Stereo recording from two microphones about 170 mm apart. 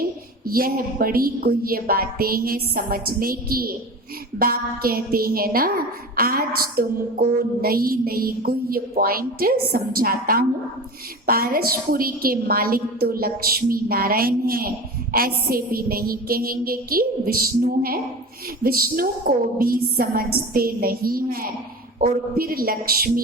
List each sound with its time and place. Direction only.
0.4 s a woman's voice: 60° right (ahead or behind)